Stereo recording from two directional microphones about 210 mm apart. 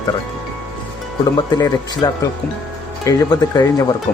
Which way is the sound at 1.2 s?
15° left (ahead or behind).